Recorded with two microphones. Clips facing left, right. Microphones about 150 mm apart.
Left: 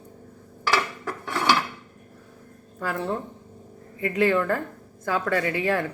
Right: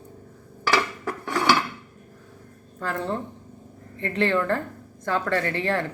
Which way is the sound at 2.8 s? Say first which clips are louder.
Even; 10° left (ahead or behind).